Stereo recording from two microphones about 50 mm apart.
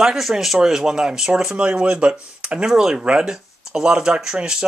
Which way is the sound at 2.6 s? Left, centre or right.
Centre.